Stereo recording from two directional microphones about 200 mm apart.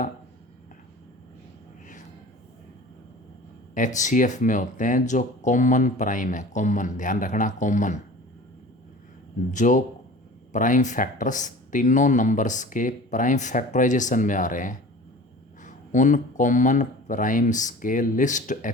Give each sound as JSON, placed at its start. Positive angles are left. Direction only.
{"t": 3.8, "sound": "speech", "side_deg": 40}
{"t": 9.5, "sound": "speech", "side_deg": 40}